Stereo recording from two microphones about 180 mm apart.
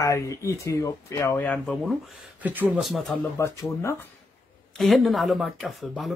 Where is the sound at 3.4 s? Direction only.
15° left (ahead or behind).